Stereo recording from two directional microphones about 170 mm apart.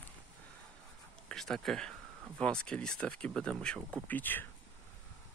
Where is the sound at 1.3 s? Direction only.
5° left (ahead or behind).